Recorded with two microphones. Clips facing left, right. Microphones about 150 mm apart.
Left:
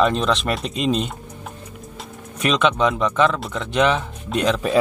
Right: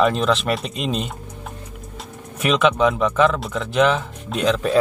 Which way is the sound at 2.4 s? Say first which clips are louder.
Right 1 dB; 5° right (ahead or behind).